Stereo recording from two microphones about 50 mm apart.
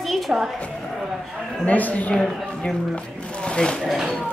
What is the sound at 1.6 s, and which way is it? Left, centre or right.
Speech, left.